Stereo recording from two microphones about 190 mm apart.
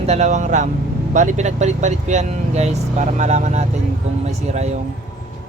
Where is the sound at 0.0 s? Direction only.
35° right (ahead or behind).